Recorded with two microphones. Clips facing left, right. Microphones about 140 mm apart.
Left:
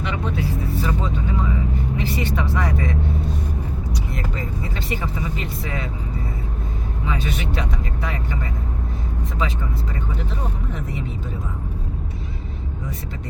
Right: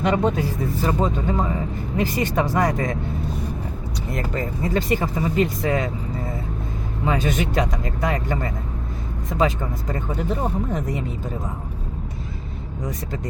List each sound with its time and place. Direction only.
0.0 s vehicle: 45° right (ahead or behind)
0.8 s speech: 40° right (ahead or behind)
4.1 s speech: 45° right (ahead or behind)
7.0 s speech: 45° right (ahead or behind)
9.9 s speech: 40° right (ahead or behind)